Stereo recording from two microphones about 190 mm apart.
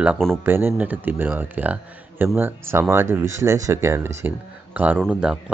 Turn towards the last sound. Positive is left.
turn(degrees=-5)  # may be behind; listen again after turning